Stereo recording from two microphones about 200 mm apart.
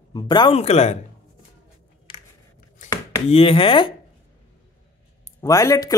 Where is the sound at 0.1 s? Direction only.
20° left (ahead or behind).